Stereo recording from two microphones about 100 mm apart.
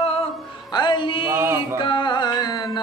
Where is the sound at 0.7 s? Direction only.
45° left (ahead or behind).